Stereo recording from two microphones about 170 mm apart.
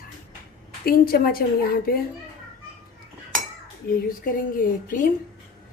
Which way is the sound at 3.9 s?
55° left (ahead or behind).